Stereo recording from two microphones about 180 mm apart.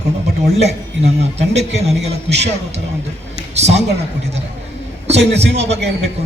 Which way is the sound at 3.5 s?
35° right (ahead or behind).